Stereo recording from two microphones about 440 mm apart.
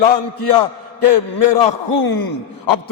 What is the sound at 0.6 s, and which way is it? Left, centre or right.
A man's voice, left.